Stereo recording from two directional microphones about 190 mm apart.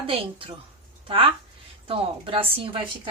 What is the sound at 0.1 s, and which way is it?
A woman's voice, 25° right (ahead or behind).